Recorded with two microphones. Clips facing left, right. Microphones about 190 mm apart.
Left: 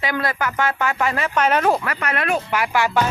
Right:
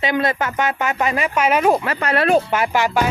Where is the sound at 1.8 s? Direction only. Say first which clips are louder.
Right 5 dB; 30° right (ahead or behind).